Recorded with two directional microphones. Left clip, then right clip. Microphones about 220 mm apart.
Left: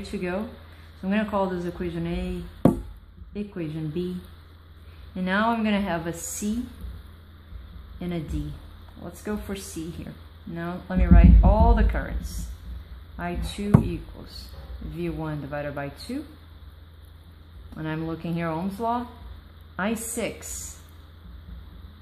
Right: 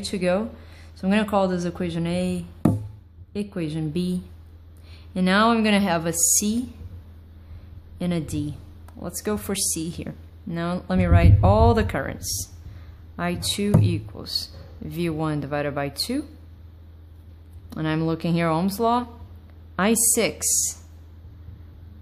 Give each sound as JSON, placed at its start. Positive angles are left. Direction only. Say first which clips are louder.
{"t": 0.0, "sound": "speech", "louder": "right 7 dB", "side_deg": -50}
{"t": 3.3, "sound": "speech", "louder": "right 4 dB", "side_deg": -50}
{"t": 5.1, "sound": "speech", "louder": "right 5 dB", "side_deg": -45}
{"t": 8.3, "sound": "speech", "louder": "right 6 dB", "side_deg": -50}
{"t": 17.6, "sound": "speech", "louder": "right 6 dB", "side_deg": -50}